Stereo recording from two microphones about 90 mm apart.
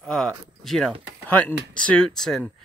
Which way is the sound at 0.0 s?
10° left (ahead or behind).